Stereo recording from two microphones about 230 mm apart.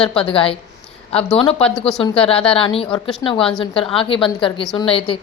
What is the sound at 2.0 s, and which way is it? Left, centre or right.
A woman's voice, left.